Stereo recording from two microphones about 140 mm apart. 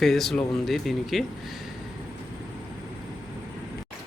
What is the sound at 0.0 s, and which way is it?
Speech, centre (ahead or behind).